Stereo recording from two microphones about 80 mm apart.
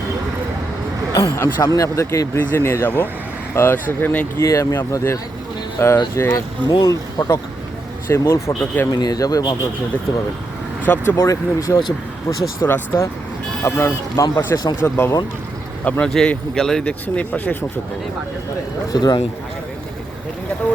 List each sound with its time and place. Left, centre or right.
1.1 s speech: left
4.4 s speech: left
6.3 s speech: left
8.1 s speech: left
8.9 s a man's voice: left
10.8 s speech: left
11.2 s speech: left
12.6 s speech: left
14.5 s a man's voice: left
14.8 s speech: left
15.8 s speech: centre
16.0 s speech: centre
18.9 s a man's voice: left